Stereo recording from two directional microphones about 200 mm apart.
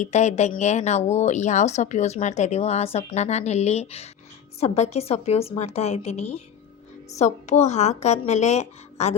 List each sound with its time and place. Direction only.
0.0 s a woman's voice: 35° left (ahead or behind)